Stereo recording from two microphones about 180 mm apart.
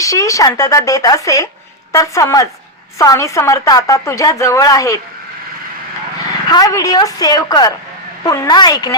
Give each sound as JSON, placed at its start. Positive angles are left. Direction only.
{"t": 0.0, "sound": "speech", "side_deg": 20}
{"t": 6.5, "sound": "speech", "side_deg": 20}